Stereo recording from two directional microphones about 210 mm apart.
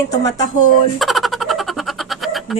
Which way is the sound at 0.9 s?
Centre (ahead or behind).